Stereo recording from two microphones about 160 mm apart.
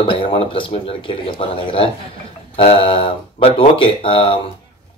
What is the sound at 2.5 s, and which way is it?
Speech, 35° left (ahead or behind).